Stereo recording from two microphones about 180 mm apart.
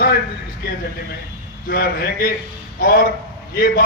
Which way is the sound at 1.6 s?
55° left (ahead or behind).